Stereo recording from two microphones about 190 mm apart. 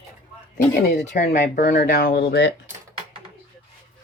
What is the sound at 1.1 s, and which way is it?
Speech, 50° left (ahead or behind).